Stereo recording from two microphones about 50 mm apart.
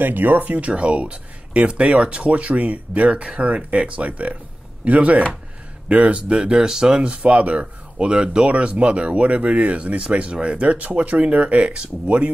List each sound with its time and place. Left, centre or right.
0.0 s speech: right
8.1 s speech: centre
8.5 s speech: right